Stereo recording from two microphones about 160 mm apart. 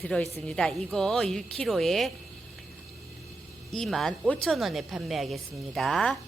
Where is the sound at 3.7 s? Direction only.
Centre (ahead or behind).